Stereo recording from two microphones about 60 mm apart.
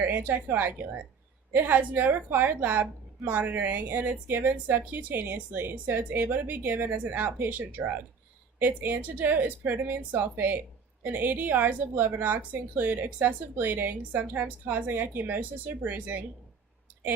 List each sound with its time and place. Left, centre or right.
0.0 s speech: right